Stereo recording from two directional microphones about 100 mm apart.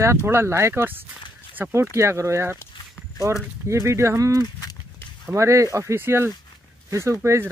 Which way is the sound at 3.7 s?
30° right (ahead or behind).